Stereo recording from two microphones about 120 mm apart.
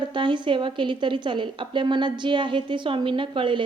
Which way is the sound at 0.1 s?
40° right (ahead or behind).